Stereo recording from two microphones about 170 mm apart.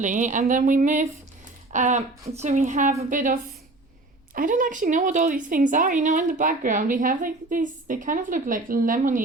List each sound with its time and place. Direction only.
0.0 s a woman's voice: 45° right (ahead or behind)
4.4 s a woman's voice: 50° right (ahead or behind)